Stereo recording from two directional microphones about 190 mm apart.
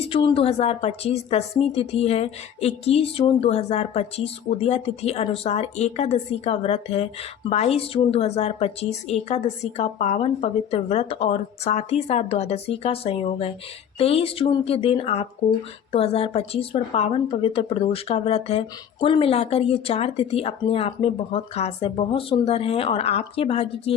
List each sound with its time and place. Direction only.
0.0 s speech: 30° left (ahead or behind)